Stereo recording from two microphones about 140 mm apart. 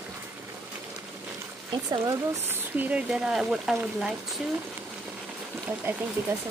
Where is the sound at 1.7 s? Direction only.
30° right (ahead or behind).